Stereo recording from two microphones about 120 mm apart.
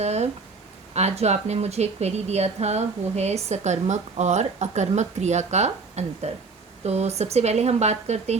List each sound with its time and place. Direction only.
0.0 s speech: 65° right (ahead or behind)